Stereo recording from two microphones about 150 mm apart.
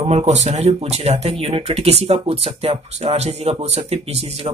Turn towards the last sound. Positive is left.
turn(degrees=-45)  # may be behind; listen again after turning